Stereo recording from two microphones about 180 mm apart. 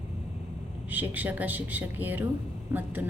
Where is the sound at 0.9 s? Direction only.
10° right (ahead or behind).